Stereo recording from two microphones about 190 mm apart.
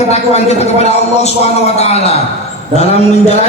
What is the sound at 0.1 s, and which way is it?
A man's voice, 35° left (ahead or behind).